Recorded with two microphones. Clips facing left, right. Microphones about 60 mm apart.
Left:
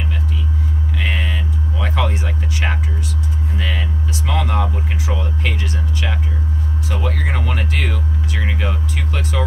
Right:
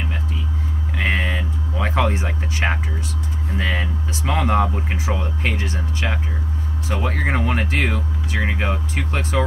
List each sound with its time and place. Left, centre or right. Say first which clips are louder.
0.9 s music: right 3 dB; right
3.5 s speech: right 3 dB; right